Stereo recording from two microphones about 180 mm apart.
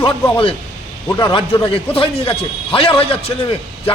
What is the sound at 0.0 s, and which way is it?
Speech, 30° left (ahead or behind).